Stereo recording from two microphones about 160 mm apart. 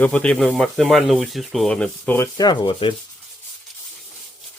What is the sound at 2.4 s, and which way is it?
Speech, 25° left (ahead or behind).